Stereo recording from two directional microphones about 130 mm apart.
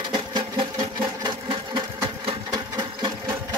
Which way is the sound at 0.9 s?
35° right (ahead or behind).